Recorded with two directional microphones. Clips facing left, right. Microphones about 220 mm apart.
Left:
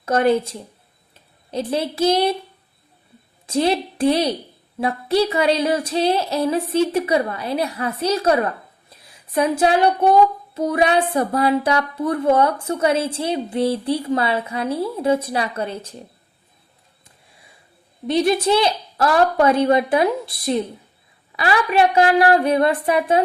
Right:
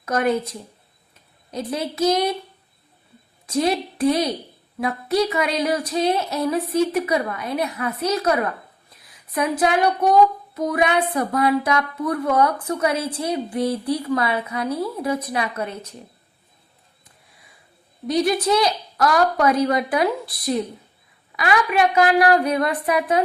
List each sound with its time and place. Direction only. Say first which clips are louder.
0.0 s female singing: left 4 dB; 30° left (ahead or behind)
1.1 s speech: left 4 dB; 30° left (ahead or behind)
3.4 s female singing: left 2 dB; 30° left (ahead or behind)
18.1 s female singing: left 2 dB; 25° left (ahead or behind)